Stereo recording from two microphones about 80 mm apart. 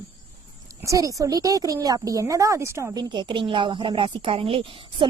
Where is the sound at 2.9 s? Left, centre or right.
Right.